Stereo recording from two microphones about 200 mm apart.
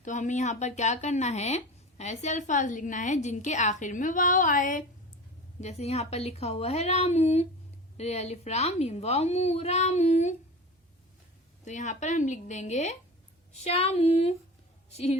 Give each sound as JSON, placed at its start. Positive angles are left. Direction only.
{"t": 0.0, "sound": "speech", "side_deg": 40}
{"t": 11.6, "sound": "speech", "side_deg": 35}